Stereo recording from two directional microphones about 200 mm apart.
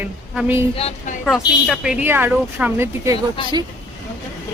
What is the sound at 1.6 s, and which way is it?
Speech, centre (ahead or behind).